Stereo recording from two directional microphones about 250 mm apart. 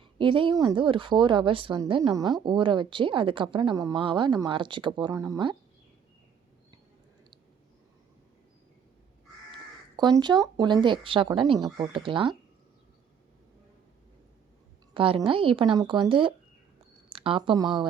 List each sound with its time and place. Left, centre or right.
0.0 s speech: centre
9.5 s speech: centre
14.9 s speech: right